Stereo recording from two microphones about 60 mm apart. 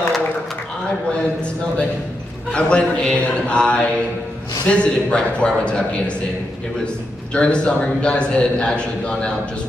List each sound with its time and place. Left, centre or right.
1.1 s a man's voice: centre
7.3 s a man's voice: centre